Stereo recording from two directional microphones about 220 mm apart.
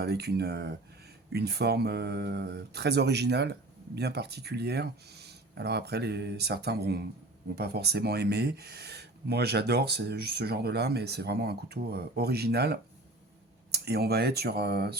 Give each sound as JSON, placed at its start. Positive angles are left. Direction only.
{"t": 0.0, "sound": "speech", "side_deg": -45}